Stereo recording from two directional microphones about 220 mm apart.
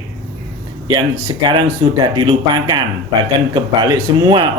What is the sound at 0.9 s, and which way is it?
Speech, 20° right (ahead or behind).